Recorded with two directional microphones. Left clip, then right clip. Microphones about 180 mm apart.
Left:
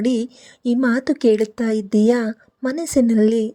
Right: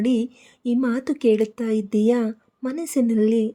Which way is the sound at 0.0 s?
25° left (ahead or behind).